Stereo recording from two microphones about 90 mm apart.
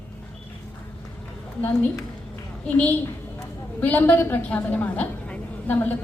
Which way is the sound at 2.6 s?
15° left (ahead or behind).